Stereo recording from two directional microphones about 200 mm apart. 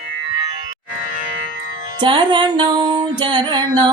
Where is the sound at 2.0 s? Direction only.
25° right (ahead or behind).